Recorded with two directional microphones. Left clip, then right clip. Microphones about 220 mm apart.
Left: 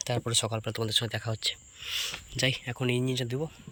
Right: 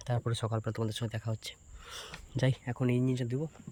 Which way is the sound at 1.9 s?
40° right (ahead or behind).